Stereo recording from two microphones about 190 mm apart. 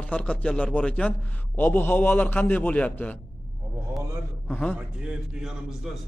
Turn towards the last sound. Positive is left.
turn(degrees=0)  # may be behind; listen again after turning